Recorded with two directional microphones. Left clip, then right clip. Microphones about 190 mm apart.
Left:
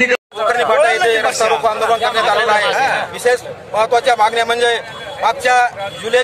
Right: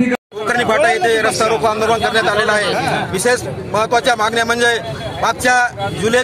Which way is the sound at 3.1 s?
5° left (ahead or behind).